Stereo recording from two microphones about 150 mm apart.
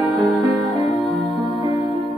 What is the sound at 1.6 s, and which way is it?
Music, 20° right (ahead or behind).